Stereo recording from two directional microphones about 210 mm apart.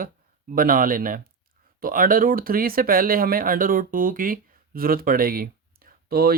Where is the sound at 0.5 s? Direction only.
40° right (ahead or behind).